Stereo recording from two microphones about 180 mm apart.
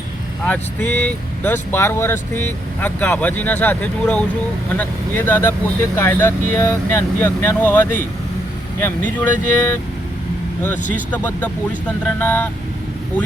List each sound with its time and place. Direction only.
0.4 s speech: 10° left (ahead or behind)
11.1 s speech: 10° left (ahead or behind)